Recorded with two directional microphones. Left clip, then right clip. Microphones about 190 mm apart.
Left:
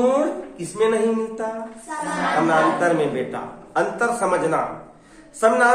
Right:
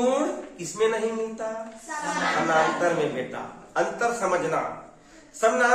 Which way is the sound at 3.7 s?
35° left (ahead or behind).